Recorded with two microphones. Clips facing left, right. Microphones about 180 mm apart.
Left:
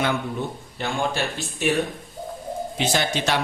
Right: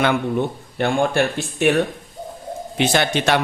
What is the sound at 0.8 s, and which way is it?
Speech, 60° right (ahead or behind).